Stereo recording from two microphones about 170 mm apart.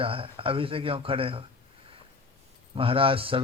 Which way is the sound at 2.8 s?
30° right (ahead or behind).